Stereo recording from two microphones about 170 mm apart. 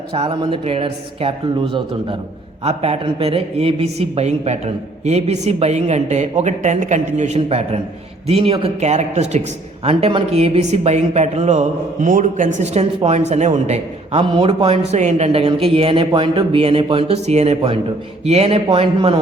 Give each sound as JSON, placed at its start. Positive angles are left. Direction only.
{"t": 0.1, "sound": "speech", "side_deg": -30}